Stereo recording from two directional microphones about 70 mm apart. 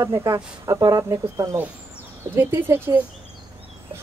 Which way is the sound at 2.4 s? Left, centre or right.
Right.